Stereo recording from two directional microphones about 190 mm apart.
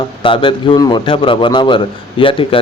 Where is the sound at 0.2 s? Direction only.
25° left (ahead or behind).